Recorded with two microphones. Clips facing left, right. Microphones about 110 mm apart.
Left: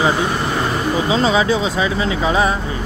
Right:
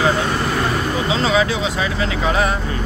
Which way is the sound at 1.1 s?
35° left (ahead or behind).